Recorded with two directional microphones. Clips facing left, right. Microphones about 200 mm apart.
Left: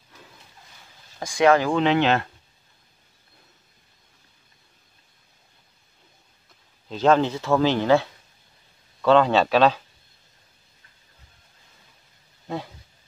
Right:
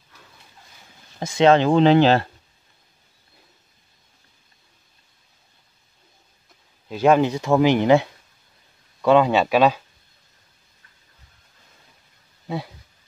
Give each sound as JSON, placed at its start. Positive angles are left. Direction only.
{"t": 1.2, "sound": "speech", "side_deg": -25}
{"t": 1.7, "sound": "speech", "side_deg": -35}
{"t": 6.9, "sound": "speech", "side_deg": -10}